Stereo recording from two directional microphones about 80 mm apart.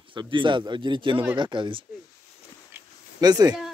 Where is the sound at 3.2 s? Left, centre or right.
Right.